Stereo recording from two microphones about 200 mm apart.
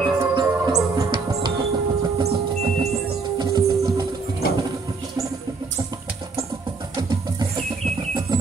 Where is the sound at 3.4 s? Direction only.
20° right (ahead or behind).